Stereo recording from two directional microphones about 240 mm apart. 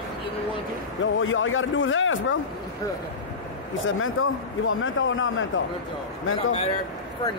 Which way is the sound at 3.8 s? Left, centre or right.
Left.